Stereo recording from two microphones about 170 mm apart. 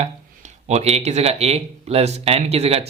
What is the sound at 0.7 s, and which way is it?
Speech, 40° right (ahead or behind).